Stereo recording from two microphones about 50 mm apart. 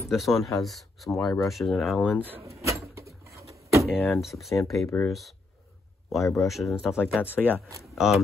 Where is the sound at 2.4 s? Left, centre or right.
Right.